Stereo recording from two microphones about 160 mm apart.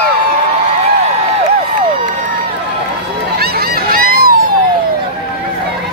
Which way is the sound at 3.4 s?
65° right (ahead or behind).